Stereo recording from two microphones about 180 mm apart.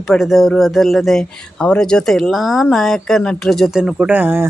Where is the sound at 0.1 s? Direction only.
Centre (ahead or behind).